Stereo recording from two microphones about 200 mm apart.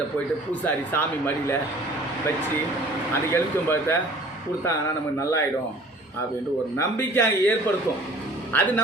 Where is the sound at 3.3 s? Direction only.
10° left (ahead or behind).